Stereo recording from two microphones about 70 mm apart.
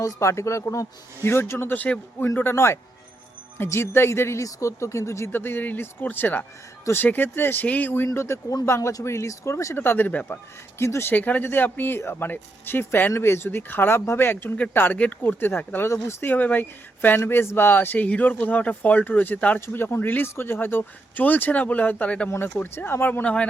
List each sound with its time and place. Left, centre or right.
0.0 s speech: left
5.3 s speech: left
8.0 s speech: left
9.7 s speech: left
10.8 s speech: left
11.1 s speech: left
16.3 s speech: left
22.3 s speech: left
23.2 s a man's voice: centre